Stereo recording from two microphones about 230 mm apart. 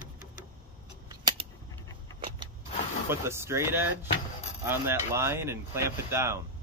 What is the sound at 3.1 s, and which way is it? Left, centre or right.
Speech, centre.